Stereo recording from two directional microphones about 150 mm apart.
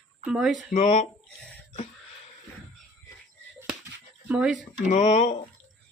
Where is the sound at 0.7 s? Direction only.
50° left (ahead or behind).